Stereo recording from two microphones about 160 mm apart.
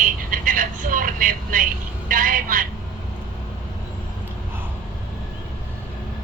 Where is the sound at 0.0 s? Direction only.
55° right (ahead or behind).